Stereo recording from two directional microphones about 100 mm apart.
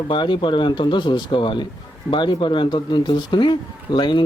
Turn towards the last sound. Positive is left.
turn(degrees=55)  # may be behind; listen again after turning